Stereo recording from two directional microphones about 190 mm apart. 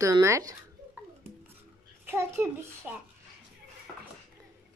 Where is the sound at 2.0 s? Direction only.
15° right (ahead or behind).